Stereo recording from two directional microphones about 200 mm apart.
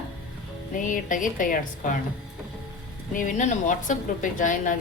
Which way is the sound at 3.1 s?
40° left (ahead or behind).